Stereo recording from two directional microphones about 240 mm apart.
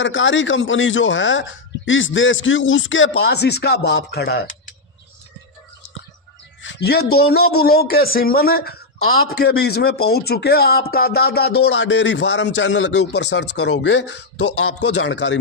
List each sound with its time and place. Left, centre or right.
0.0 s a man's voice: left
6.6 s a man's voice: left
14.4 s speech: left
14.8 s a man's voice: left